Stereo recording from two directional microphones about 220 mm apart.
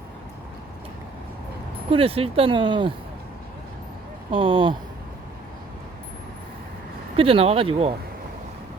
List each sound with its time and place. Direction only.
1.9 s speech: 25° right (ahead or behind)
4.3 s speech: 25° right (ahead or behind)
7.2 s speech: 25° right (ahead or behind)